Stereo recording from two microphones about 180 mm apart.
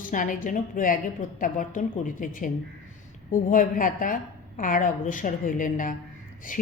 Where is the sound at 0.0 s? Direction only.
50° left (ahead or behind).